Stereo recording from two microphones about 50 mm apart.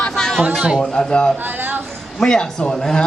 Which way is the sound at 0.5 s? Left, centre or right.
Centre.